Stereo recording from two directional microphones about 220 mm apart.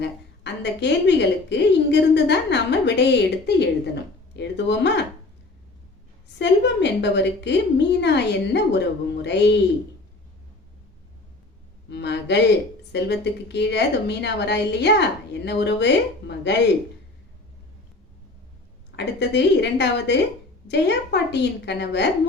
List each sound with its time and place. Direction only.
0.0 s a woman's voice: 50° left (ahead or behind)
6.2 s a woman's voice: 50° left (ahead or behind)
11.9 s a woman's voice: 50° left (ahead or behind)
18.9 s a woman's voice: 50° left (ahead or behind)